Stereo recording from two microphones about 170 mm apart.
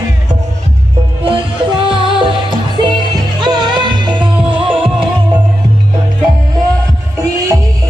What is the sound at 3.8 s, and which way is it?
Music, 25° right (ahead or behind).